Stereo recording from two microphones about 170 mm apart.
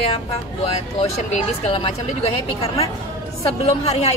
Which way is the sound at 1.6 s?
35° left (ahead or behind).